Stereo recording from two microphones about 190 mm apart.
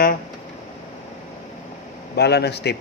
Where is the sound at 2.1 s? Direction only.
60° left (ahead or behind).